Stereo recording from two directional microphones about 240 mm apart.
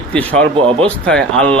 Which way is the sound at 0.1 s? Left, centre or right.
Centre.